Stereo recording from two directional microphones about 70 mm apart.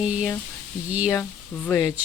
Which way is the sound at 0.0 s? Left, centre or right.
Centre.